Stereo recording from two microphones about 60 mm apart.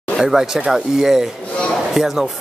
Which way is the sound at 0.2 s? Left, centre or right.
Centre.